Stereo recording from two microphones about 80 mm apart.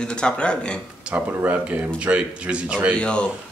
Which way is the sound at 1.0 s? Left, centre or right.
Centre.